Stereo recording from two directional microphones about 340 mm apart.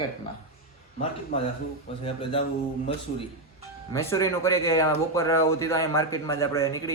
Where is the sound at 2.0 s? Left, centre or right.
Centre.